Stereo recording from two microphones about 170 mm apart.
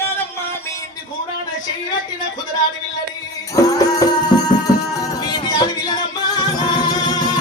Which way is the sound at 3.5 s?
20° left (ahead or behind).